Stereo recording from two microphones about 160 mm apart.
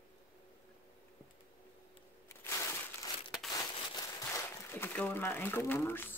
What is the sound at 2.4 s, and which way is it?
Crushing, 20° left (ahead or behind).